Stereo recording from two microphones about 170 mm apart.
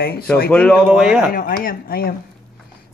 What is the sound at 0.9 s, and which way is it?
Speech, 5° right (ahead or behind).